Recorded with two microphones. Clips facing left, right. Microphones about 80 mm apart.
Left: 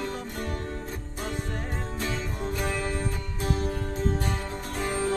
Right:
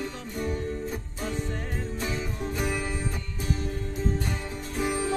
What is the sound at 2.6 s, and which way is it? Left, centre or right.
Music, centre.